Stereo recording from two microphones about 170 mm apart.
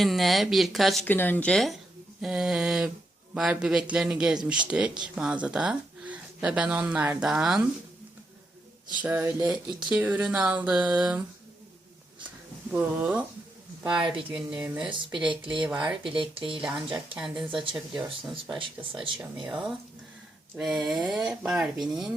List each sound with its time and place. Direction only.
0.0 s speech: centre (ahead or behind)
1.0 s speech: 10° left (ahead or behind); by 7.6 s 5° right (ahead or behind)
9.0 s speech: 10° right (ahead or behind)
12.7 s speech: 10° right (ahead or behind)
14.3 s speech: 5° right (ahead or behind)
15.3 s speech: 30° right (ahead or behind)
15.6 s speech: 5° right (ahead or behind)
16.1 s speech: 30° right (ahead or behind)
17.2 s speech: 5° right (ahead or behind)
17.5 s speech: 30° right (ahead or behind)
17.7 s speech: 5° right (ahead or behind)
18.6 s speech: 30° right (ahead or behind)
19.5 s speech: 5° right (ahead or behind)